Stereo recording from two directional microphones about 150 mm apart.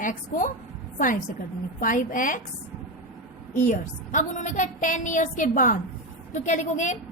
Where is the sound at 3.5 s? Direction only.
55° left (ahead or behind).